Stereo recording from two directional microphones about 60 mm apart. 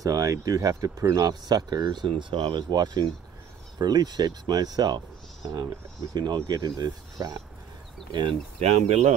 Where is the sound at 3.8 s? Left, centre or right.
Right.